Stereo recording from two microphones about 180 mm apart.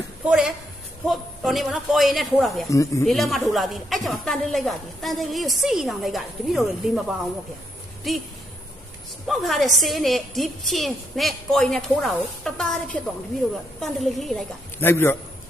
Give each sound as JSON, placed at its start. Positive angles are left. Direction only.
{"t": 0.3, "sound": "a woman's voice", "side_deg": -5}
{"t": 2.6, "sound": "speech", "side_deg": 15}
{"t": 3.1, "sound": "a woman's voice", "side_deg": 0}
{"t": 8.1, "sound": "a woman's voice", "side_deg": 0}
{"t": 9.2, "sound": "a woman's voice", "side_deg": 0}
{"t": 14.8, "sound": "speech", "side_deg": 10}